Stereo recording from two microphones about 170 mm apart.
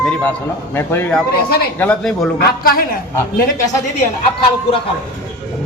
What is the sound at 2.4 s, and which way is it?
Speech, 60° left (ahead or behind).